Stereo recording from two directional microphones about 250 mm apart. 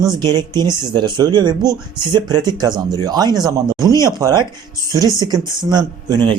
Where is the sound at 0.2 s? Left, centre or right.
Centre.